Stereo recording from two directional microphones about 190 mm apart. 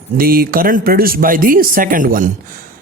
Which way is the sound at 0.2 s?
50° right (ahead or behind).